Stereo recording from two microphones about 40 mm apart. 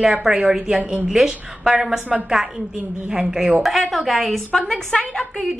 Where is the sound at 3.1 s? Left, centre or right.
Centre.